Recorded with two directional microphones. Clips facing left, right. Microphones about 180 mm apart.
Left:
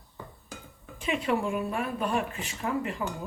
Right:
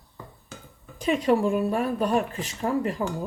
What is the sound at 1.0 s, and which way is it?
Speech, 40° right (ahead or behind).